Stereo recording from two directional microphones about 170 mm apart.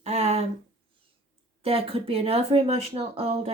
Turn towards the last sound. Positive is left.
turn(degrees=-35)  # may be behind; listen again after turning